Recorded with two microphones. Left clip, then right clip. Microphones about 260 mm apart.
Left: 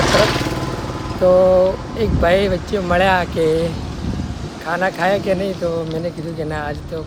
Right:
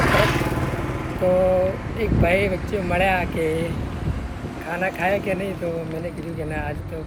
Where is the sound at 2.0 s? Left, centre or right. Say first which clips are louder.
Left 5 dB; centre.